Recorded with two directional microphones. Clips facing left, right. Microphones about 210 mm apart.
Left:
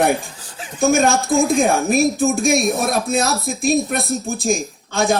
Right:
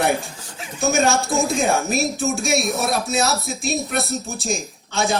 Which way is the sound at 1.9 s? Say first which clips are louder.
Left 6 dB; 50° left (ahead or behind).